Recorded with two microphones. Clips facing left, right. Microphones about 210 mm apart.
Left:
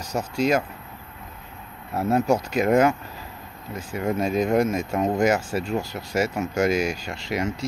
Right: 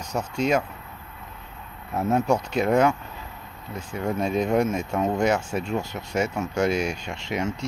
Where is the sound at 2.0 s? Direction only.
5° left (ahead or behind).